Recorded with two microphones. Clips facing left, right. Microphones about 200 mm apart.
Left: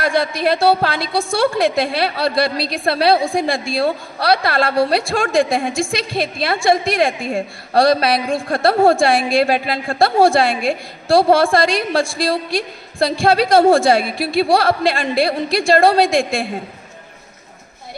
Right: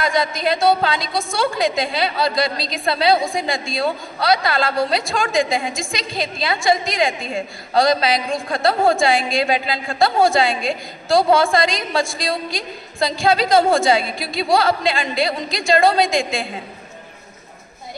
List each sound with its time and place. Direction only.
0.0 s a woman's voice: 60° left (ahead or behind)